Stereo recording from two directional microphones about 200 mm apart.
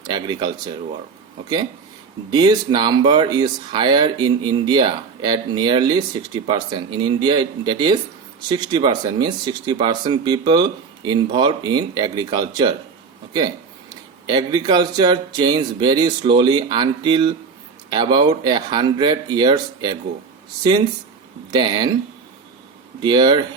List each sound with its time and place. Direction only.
0.0 s speech: 20° right (ahead or behind)
2.3 s speech: 20° right (ahead or behind)
13.9 s speech: 20° right (ahead or behind)
21.5 s speech: 20° right (ahead or behind)
23.0 s speech: 20° right (ahead or behind)